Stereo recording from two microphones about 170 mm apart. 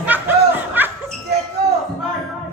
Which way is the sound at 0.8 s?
10° right (ahead or behind).